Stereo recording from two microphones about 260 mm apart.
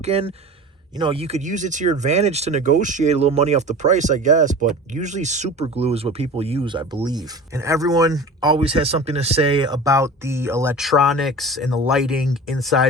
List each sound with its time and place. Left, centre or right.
0.0 s speech: right; by 12.9 s centre